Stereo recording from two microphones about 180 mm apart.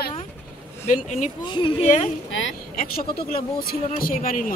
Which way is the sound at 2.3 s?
90° left.